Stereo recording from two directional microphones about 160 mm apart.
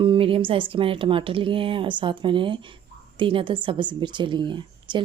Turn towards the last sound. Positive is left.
turn(degrees=-30)  # may be behind; listen again after turning